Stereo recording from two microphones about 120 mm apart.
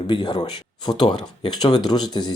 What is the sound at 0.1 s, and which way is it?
Speech, 35° left (ahead or behind).